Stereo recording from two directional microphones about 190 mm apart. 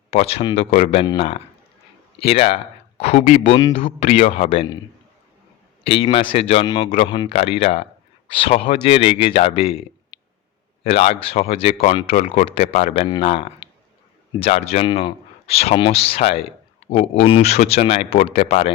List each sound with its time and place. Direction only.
0.1 s speech: 35° left (ahead or behind)
5.8 s speech: 30° left (ahead or behind)
10.8 s speech: 30° left (ahead or behind)